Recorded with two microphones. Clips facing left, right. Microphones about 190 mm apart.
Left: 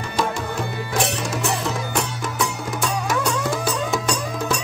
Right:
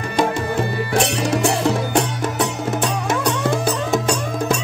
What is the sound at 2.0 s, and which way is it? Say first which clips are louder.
Music: right 5 dB; 25° right (ahead or behind).